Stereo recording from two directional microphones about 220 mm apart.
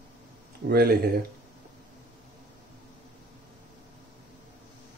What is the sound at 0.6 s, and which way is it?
Speech, 45° right (ahead or behind).